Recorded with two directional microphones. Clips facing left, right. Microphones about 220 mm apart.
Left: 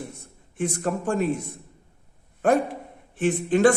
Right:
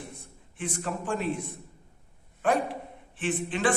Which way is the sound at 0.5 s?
45° left (ahead or behind).